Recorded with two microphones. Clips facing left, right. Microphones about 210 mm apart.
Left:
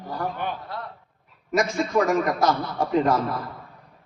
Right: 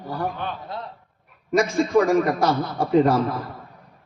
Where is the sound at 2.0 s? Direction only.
30° right (ahead or behind).